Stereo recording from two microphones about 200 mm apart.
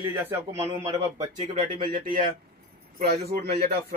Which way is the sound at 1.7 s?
45° right (ahead or behind).